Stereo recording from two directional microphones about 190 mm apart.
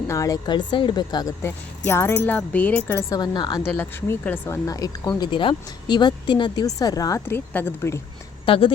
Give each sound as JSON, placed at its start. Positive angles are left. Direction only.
{"t": 0.1, "sound": "speech", "side_deg": 15}
{"t": 3.2, "sound": "a woman's voice", "side_deg": 25}
{"t": 3.8, "sound": "speech", "side_deg": 10}
{"t": 8.4, "sound": "a woman's voice", "side_deg": 30}